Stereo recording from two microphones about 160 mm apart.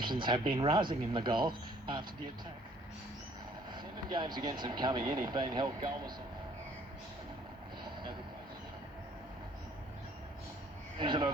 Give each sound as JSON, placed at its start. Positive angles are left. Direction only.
{"t": 0.0, "sound": "speech", "side_deg": -30}
{"t": 3.8, "sound": "speech", "side_deg": -30}
{"t": 11.0, "sound": "speech", "side_deg": -30}